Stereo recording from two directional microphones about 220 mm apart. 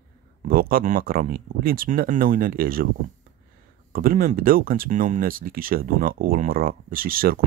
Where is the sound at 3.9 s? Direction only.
40° right (ahead or behind).